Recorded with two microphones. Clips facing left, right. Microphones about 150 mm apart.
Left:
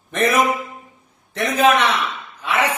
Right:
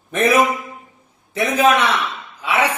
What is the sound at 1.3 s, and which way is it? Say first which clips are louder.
Speech: right 1 dB; 10° right (ahead or behind).